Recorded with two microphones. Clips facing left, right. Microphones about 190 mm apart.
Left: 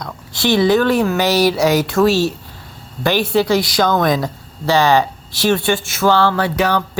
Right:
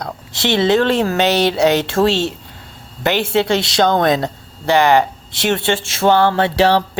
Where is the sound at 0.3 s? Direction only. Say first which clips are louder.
Left 1 dB; 25° right (ahead or behind).